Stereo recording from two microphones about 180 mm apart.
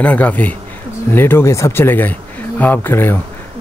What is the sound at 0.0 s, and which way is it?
Speech, 10° left (ahead or behind).